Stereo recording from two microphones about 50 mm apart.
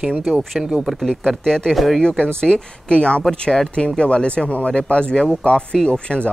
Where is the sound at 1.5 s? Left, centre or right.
Centre.